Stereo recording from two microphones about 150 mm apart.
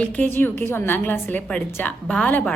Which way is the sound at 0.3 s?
15° left (ahead or behind).